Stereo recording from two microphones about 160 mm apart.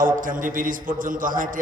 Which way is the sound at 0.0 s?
55° right (ahead or behind).